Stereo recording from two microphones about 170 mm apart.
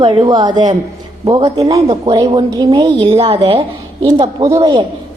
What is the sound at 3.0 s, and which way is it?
Speech, 35° right (ahead or behind).